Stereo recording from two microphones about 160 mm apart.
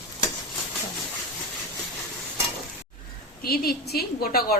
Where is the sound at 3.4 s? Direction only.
70° left (ahead or behind).